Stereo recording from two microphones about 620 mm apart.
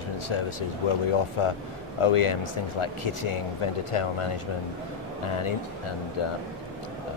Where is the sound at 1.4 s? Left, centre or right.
Left.